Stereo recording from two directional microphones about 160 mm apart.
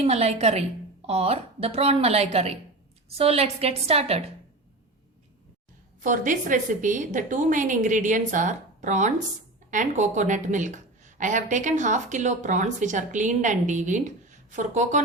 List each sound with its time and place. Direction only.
0.0 s a woman's voice: 40° right (ahead or behind)
6.0 s speech: 55° right (ahead or behind)